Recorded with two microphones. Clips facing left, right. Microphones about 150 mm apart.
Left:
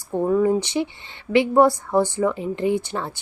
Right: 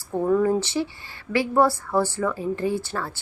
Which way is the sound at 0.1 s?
15° left (ahead or behind).